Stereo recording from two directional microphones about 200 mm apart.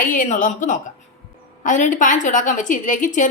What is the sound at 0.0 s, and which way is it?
A woman's voice, 40° left (ahead or behind).